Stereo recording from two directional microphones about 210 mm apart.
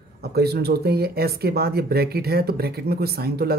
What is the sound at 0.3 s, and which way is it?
Speech, 50° right (ahead or behind).